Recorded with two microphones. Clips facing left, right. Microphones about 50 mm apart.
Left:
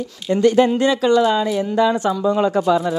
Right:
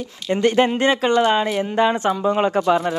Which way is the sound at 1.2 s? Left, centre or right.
Right.